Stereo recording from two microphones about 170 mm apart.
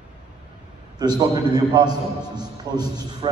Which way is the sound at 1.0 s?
25° right (ahead or behind).